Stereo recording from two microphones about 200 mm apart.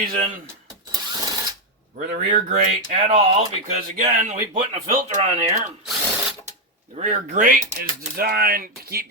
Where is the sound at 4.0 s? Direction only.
35° right (ahead or behind).